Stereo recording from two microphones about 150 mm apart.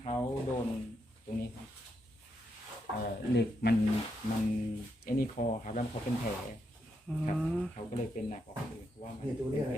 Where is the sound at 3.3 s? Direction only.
90° left.